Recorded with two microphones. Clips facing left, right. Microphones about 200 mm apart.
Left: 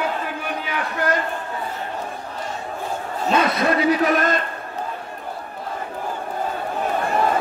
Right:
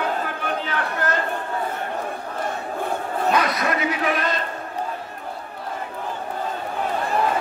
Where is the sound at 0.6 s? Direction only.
10° left (ahead or behind).